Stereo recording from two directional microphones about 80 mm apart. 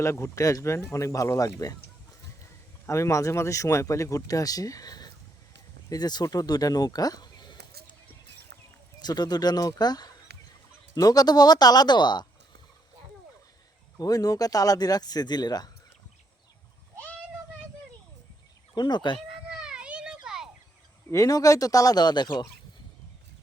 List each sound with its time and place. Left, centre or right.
0.0 s speech: left
2.8 s speech: left
9.0 s speech: left
14.0 s speech: left
18.7 s speech: left
19.3 s children playing: centre
21.1 s speech: left